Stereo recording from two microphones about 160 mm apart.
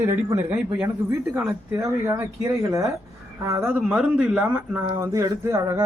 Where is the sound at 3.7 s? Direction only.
5° right (ahead or behind); by 5.8 s 20° right (ahead or behind).